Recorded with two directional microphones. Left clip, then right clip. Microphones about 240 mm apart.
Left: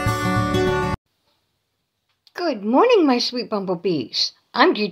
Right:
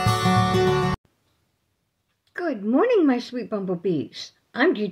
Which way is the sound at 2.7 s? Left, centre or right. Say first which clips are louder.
Left 4 dB; left.